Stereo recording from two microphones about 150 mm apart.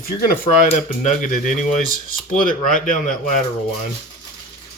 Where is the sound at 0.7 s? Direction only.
55° left (ahead or behind).